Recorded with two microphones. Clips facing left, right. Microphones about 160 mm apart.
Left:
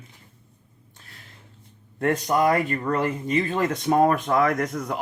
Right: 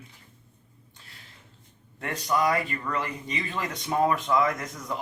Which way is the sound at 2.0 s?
50° left (ahead or behind).